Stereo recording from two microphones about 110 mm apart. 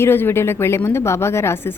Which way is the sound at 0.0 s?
20° left (ahead or behind).